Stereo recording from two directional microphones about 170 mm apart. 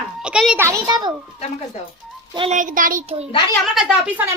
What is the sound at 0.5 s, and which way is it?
Speech, 15° right (ahead or behind).